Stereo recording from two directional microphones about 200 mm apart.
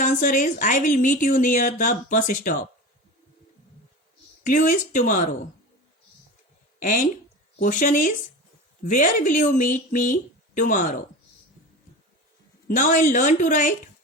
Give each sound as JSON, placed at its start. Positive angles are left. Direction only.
{"t": 0.0, "sound": "a woman's voice", "side_deg": 40}
{"t": 4.4, "sound": "a woman's voice", "side_deg": 40}
{"t": 6.7, "sound": "a woman's voice", "side_deg": 40}
{"t": 12.6, "sound": "a woman's voice", "side_deg": 40}